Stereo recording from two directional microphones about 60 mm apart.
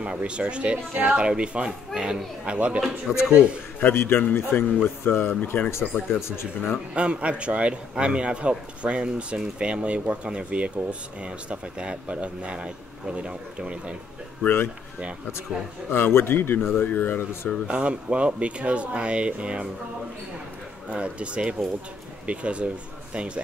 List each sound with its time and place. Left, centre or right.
0.0 s speech: centre
3.8 s a man's voice: left
6.9 s a man's voice: centre
14.4 s a man's voice: left
15.9 s a man's voice: left
17.6 s a man's voice: centre
20.9 s a man's voice: centre